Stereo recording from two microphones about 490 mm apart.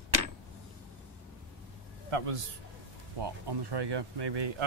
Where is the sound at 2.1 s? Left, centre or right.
Right.